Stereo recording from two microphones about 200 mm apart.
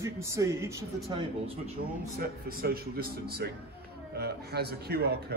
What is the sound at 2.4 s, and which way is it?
Speech, 50° right (ahead or behind).